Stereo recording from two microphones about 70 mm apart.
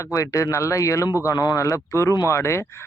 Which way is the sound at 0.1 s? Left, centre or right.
Left.